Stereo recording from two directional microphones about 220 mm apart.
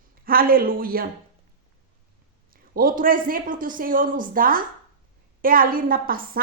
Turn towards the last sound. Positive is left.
turn(degrees=-40)  # may be behind; listen again after turning